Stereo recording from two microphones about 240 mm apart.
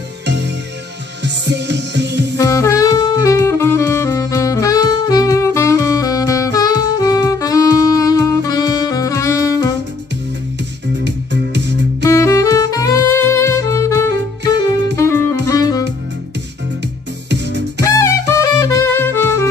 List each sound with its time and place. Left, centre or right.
1.2 s music: right
2.3 s saxophone: centre
11.1 s music: right
12.0 s saxophone: centre
15.0 s music: centre
17.3 s music: right
17.8 s music: centre